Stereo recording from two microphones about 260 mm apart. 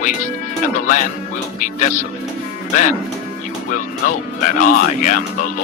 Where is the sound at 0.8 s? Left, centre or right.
Left.